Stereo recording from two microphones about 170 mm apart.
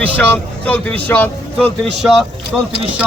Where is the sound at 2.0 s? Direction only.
Centre (ahead or behind).